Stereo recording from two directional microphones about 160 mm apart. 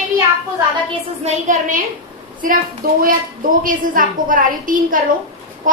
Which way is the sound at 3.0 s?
60° right (ahead or behind).